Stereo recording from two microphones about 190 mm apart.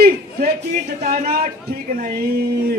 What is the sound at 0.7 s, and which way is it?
Speech, 40° right (ahead or behind).